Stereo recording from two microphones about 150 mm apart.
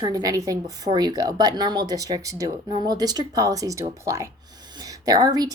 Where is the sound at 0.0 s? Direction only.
25° right (ahead or behind).